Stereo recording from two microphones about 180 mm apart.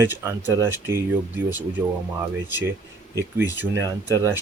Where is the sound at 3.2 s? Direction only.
15° right (ahead or behind).